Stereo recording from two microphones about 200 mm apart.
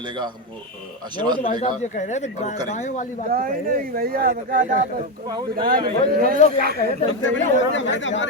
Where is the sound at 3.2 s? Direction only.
45° right (ahead or behind).